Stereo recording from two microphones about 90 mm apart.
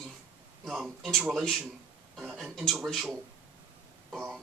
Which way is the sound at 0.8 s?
Centre (ahead or behind).